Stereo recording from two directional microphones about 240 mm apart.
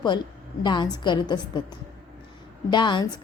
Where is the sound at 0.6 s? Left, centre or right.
Centre.